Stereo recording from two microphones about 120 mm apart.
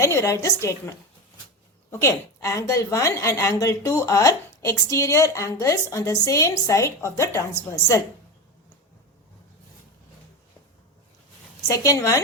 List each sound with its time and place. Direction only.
0.0 s a woman's voice: 25° left (ahead or behind)
11.7 s a woman's voice: 25° left (ahead or behind)